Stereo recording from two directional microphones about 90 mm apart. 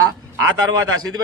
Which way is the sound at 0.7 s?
45° right (ahead or behind).